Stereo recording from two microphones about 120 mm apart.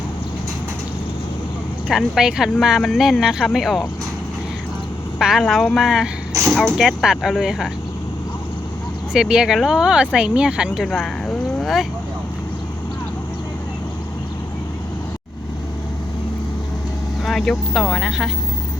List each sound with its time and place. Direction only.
1.9 s speech: 5° right (ahead or behind)
5.2 s speech: centre (ahead or behind)
9.1 s speech: 5° right (ahead or behind)
17.2 s speech: 5° left (ahead or behind)